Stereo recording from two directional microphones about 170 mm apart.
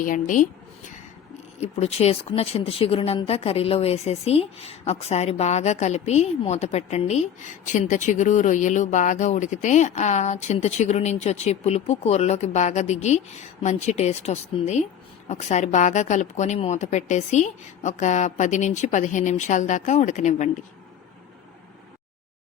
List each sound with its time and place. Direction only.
0.0 s a woman's voice: 50° left (ahead or behind)
1.6 s a woman's voice: 40° left (ahead or behind)